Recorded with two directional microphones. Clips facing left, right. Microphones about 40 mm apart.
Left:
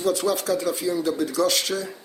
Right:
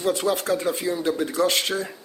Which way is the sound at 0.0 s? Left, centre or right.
Right.